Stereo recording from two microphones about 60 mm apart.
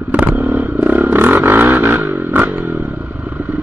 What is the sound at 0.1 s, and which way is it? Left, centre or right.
Vehicle, right.